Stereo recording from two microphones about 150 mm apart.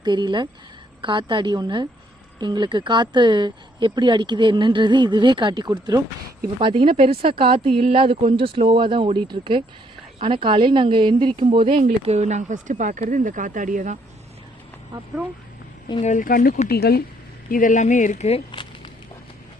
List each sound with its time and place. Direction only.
0.0 s speech: 30° right (ahead or behind)
12.0 s speech: 50° right (ahead or behind)
16.0 s speech: 60° left (ahead or behind)
16.6 s speech: 90° left
17.5 s speech: 60° left (ahead or behind); by 18.7 s 40° left (ahead or behind)